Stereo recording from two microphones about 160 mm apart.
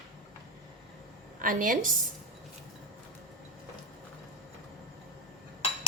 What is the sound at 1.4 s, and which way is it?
Speech, 60° right (ahead or behind).